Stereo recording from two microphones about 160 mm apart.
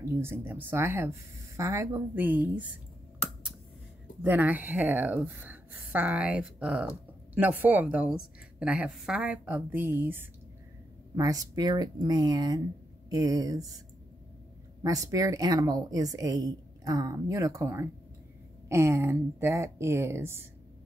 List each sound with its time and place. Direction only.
0.0 s a woman's voice: 15° right (ahead or behind)
4.2 s a woman's voice: 10° right (ahead or behind)
14.8 s a woman's voice: 20° right (ahead or behind)